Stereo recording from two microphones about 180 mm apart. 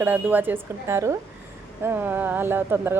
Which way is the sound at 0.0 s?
10° right (ahead or behind).